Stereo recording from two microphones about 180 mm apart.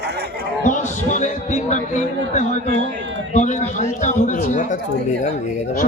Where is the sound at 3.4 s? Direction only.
40° left (ahead or behind).